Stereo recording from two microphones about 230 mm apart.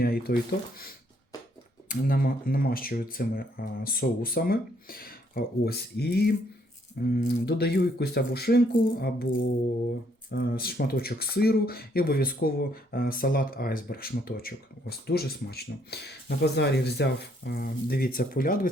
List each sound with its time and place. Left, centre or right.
0.0 s speech: left
1.9 s speech: left